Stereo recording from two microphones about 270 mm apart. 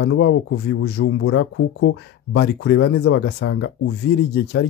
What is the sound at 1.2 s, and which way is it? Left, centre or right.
Speech, left.